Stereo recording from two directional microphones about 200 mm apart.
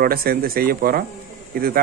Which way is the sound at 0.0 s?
50° right (ahead or behind).